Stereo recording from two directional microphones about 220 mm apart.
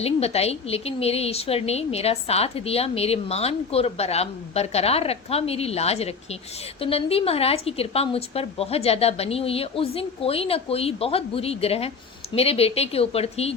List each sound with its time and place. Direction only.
0.0 s a woman's voice: 25° left (ahead or behind)